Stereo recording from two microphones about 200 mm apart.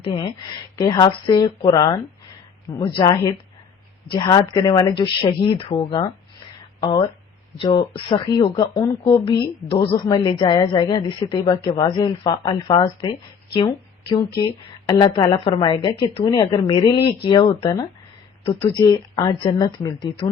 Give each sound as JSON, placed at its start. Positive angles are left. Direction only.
{"t": 0.0, "sound": "speech", "side_deg": 25}